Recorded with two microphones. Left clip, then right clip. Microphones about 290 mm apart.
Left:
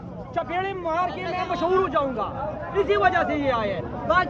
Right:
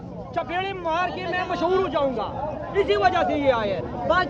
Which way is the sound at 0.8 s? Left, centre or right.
Right.